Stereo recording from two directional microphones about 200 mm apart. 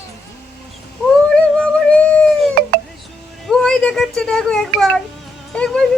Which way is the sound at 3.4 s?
Centre (ahead or behind).